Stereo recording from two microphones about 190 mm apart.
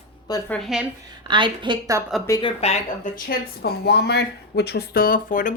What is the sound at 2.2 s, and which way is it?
Speech, 20° left (ahead or behind).